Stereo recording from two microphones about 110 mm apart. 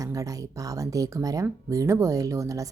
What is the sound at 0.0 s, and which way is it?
Speech, 30° right (ahead or behind).